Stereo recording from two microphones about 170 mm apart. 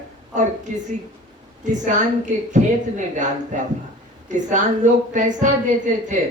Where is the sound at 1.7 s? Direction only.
45° right (ahead or behind).